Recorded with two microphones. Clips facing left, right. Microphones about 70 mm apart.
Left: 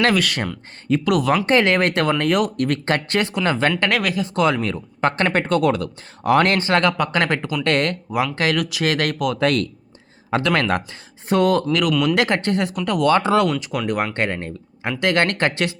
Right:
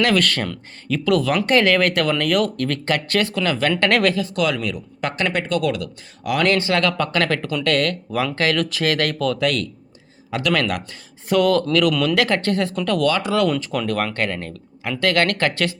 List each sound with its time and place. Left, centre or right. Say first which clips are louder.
0.2 s speech: right 1 dB; centre
3.7 s speech: right 3 dB; centre
4.2 s speech: left 2 dB; left
9.4 s speech: left 2 dB; left
11.7 s speech: right 1 dB; centre
12.1 s speech: even; left
13.1 s speech: left 5 dB; left
13.6 s speech: even; centre
14.1 s speech: left 1 dB; left